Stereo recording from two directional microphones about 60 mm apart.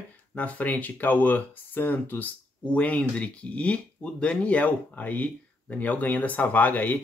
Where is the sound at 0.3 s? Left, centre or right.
Left.